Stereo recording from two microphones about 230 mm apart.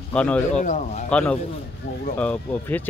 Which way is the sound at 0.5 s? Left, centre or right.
Left.